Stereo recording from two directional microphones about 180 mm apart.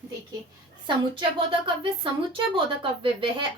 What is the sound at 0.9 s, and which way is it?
A woman's voice, 30° right (ahead or behind).